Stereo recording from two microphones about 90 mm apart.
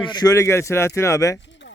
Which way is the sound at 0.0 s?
55° left (ahead or behind).